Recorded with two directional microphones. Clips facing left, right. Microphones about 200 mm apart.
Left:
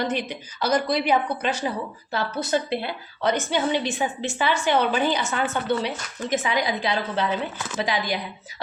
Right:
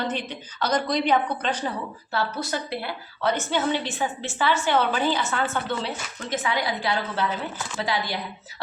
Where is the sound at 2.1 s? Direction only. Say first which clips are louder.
Left 3 dB; 20° left (ahead or behind).